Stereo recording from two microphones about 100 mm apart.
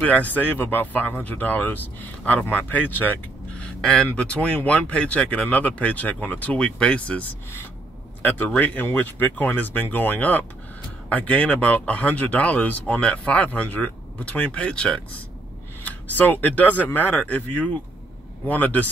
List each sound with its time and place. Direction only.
0.0 s speech: 15° left (ahead or behind)
8.5 s speech: 15° left (ahead or behind)